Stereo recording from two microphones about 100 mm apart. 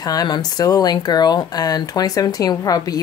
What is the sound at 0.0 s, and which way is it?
Speech, 40° left (ahead or behind).